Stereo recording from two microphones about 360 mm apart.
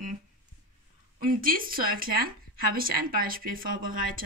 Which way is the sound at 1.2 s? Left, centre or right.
Right.